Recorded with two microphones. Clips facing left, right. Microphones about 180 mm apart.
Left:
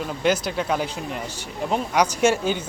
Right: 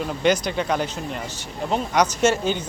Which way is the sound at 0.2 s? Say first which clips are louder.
Right 1 dB; 5° left (ahead or behind).